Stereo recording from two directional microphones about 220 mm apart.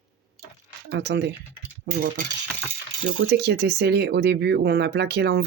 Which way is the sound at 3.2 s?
50° right (ahead or behind).